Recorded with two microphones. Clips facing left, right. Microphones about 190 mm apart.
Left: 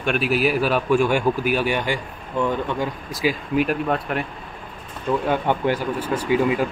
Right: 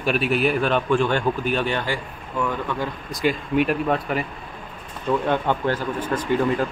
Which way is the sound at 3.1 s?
5° left (ahead or behind).